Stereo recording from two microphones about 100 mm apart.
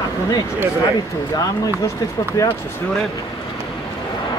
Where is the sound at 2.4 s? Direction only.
35° left (ahead or behind).